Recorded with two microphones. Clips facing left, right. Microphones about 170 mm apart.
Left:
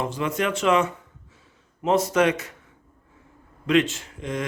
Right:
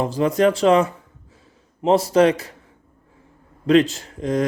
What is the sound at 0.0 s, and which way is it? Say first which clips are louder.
Speech: right 8 dB; 35° right (ahead or behind).